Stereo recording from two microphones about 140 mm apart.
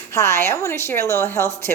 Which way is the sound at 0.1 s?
20° left (ahead or behind).